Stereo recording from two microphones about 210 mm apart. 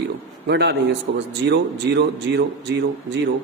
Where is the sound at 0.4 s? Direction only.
50° right (ahead or behind).